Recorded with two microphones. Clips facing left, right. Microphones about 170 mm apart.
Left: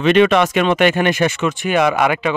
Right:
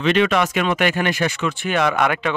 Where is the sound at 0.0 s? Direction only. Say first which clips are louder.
Left 5 dB; 20° left (ahead or behind).